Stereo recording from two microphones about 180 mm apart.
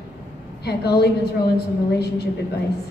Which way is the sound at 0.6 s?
65° left (ahead or behind).